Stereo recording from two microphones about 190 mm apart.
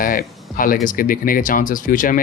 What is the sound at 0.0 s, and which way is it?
Speech, 50° left (ahead or behind).